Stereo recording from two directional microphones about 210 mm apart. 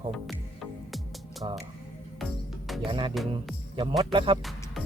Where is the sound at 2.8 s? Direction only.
25° right (ahead or behind).